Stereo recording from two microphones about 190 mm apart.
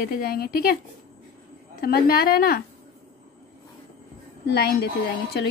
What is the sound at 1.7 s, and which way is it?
Speech, 55° left (ahead or behind).